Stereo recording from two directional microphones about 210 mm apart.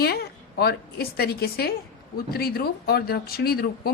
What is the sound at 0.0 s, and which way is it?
A woman's voice, 50° left (ahead or behind).